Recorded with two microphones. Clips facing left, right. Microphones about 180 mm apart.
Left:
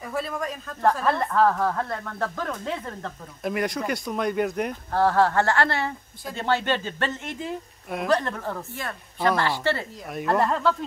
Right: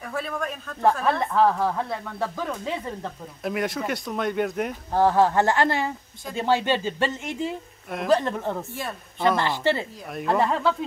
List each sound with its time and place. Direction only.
0.0 s speech: centre (ahead or behind)
4.9 s speech: 15° right (ahead or behind)
7.9 s speech: centre (ahead or behind)
8.2 s speech: 20° right (ahead or behind)
10.0 s speech: centre (ahead or behind)